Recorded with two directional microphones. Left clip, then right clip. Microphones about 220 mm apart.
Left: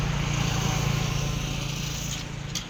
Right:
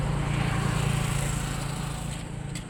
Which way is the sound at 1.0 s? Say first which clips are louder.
Left 1 dB; 20° right (ahead or behind).